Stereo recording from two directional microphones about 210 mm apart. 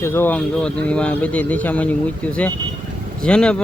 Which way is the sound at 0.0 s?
10° left (ahead or behind).